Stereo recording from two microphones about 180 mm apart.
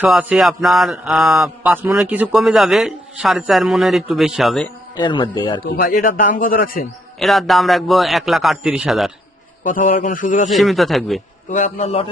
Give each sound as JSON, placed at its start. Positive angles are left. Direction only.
{"t": 0.0, "sound": "speech", "side_deg": -5}
{"t": 4.9, "sound": "speech", "side_deg": 25}
{"t": 5.7, "sound": "a man's voice", "side_deg": 55}
{"t": 7.2, "sound": "speech", "side_deg": 0}
{"t": 9.6, "sound": "a man's voice", "side_deg": 50}
{"t": 10.5, "sound": "speech", "side_deg": 0}
{"t": 11.4, "sound": "a man's voice", "side_deg": 40}